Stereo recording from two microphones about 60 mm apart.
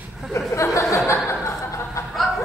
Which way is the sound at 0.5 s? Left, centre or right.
Left.